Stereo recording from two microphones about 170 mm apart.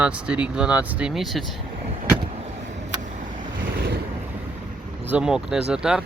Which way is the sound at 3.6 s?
65° right (ahead or behind).